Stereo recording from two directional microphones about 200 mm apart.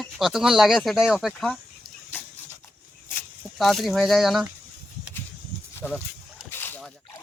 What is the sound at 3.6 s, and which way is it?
Speech, centre (ahead or behind).